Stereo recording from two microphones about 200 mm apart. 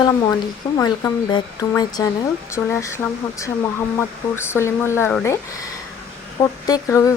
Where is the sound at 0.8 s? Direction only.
20° left (ahead or behind).